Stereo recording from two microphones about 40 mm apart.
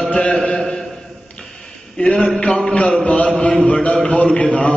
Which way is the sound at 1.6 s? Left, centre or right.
Left.